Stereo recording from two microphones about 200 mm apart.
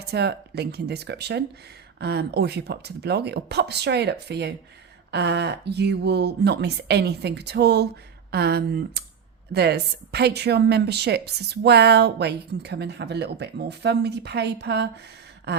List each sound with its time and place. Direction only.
0.0 s a woman's voice: 55° right (ahead or behind)